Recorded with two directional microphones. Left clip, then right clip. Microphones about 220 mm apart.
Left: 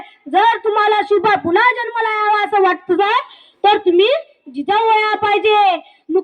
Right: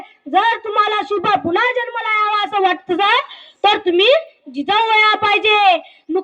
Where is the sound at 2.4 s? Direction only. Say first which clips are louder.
Left 2 dB; 55° right (ahead or behind).